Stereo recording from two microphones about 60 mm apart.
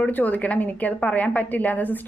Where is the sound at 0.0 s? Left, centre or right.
Left.